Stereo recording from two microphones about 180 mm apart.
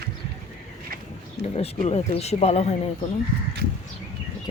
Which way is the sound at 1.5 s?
35° left (ahead or behind).